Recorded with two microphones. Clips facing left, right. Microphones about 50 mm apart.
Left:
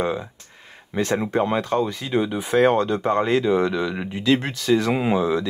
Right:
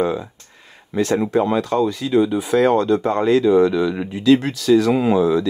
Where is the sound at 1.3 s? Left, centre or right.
Left.